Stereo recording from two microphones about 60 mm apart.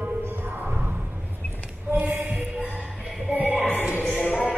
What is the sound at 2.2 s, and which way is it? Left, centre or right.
Heart sounds, centre.